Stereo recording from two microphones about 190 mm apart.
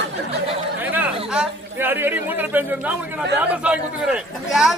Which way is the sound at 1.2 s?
10° right (ahead or behind).